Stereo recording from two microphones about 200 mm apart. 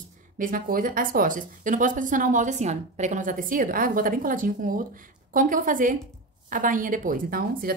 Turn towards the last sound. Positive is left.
turn(degrees=-45)  # may be behind; listen again after turning